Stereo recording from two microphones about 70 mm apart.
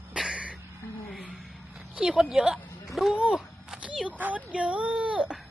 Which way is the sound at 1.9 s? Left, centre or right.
Centre.